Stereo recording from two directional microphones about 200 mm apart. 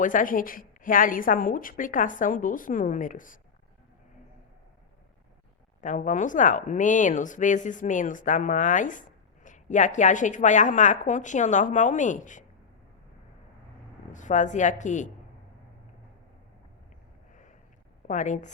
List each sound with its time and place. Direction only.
0.0 s speech: 40° left (ahead or behind)
5.8 s speech: 40° left (ahead or behind)
14.1 s speech: 40° left (ahead or behind)
18.1 s speech: 40° left (ahead or behind)